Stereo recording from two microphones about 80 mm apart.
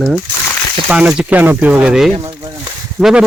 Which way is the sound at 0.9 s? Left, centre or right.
Centre.